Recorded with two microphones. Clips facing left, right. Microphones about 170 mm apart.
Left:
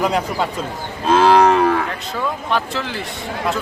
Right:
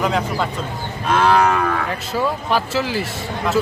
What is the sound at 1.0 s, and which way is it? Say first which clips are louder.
Cattle: left 3 dB; 30° left (ahead or behind).